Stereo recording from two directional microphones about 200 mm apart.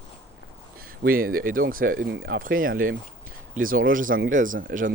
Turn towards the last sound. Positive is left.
turn(degrees=-45)  # may be behind; listen again after turning